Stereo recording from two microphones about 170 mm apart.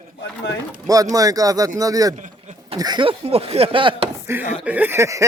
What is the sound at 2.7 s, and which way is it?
Speech, 25° right (ahead or behind).